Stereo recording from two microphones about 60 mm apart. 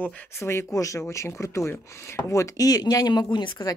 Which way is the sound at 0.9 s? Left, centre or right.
Left.